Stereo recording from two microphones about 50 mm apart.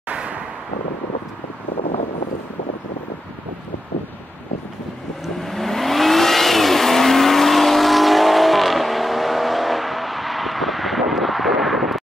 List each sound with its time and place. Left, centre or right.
0.1 s vehicle: right
5.4 s vehicle: centre